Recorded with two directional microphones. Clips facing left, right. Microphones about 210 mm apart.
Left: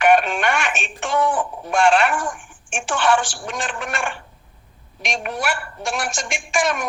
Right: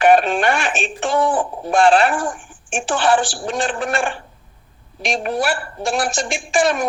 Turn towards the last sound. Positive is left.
turn(degrees=-35)  # may be behind; listen again after turning